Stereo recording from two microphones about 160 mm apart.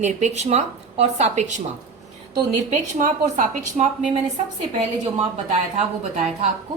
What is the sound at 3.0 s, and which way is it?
Speech, 55° right (ahead or behind).